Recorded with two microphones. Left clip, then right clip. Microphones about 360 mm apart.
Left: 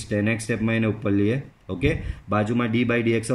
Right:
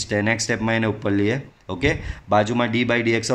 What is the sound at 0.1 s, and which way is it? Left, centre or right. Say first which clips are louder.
Speech: right 3 dB; centre.